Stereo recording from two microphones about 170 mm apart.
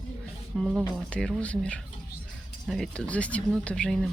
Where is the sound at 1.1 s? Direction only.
5° left (ahead or behind).